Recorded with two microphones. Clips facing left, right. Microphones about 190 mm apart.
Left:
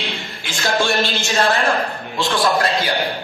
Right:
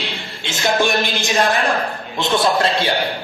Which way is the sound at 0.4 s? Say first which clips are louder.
Right 2 dB; 20° right (ahead or behind).